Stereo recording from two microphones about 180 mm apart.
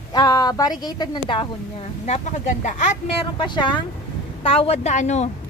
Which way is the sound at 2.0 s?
40° left (ahead or behind).